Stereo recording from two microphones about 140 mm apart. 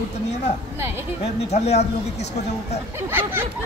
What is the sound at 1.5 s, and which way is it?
Speech, 50° left (ahead or behind).